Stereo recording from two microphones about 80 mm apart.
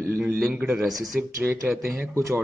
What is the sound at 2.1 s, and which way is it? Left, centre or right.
Speech, right.